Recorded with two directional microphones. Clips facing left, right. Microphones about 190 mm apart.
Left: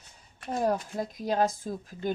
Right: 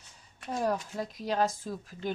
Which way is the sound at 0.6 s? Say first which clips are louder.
Left 3 dB; 45° left (ahead or behind).